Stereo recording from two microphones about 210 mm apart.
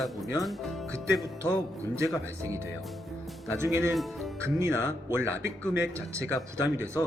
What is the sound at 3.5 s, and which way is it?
Speech, 10° right (ahead or behind).